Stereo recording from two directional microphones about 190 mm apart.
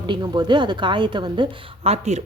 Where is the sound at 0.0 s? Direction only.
25° right (ahead or behind).